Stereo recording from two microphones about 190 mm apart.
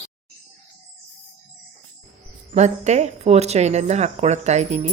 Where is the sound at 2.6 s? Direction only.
35° right (ahead or behind).